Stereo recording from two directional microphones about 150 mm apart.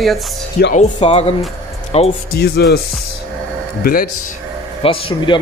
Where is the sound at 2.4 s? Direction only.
90° left.